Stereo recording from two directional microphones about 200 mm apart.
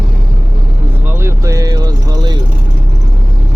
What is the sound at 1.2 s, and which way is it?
Vehicle, 15° right (ahead or behind).